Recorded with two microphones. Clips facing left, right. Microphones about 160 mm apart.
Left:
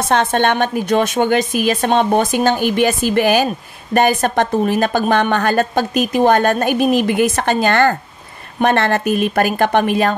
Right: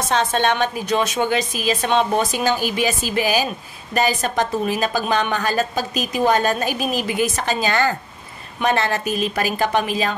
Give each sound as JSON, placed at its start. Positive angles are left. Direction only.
{"t": 0.1, "sound": "a woman's voice", "side_deg": 55}